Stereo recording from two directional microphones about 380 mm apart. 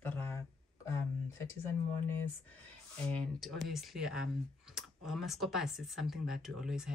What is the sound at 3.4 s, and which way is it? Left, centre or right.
Speech, centre.